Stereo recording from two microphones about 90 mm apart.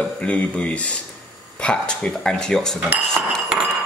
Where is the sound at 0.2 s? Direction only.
15° left (ahead or behind).